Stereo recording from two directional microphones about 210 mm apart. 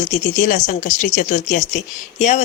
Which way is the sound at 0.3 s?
40° left (ahead or behind).